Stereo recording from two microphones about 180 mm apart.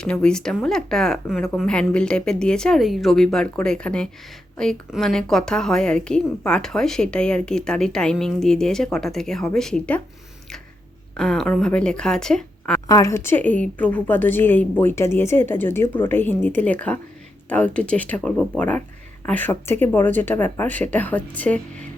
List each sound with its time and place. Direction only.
0.0 s a woman's voice: 5° left (ahead or behind)
11.2 s a woman's voice: 5° left (ahead or behind)
12.9 s a woman's voice: 15° left (ahead or behind)